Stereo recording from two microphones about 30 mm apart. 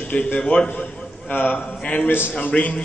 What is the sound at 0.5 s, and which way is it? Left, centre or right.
Speech, left.